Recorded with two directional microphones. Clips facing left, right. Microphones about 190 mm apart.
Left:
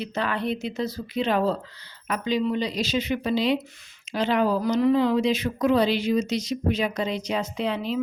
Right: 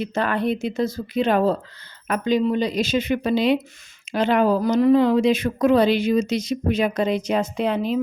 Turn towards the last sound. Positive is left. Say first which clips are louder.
# right 5 dB
turn(degrees=-50)  # may be behind; listen again after turning